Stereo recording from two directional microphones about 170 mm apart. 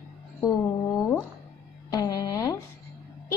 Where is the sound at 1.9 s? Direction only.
20° left (ahead or behind).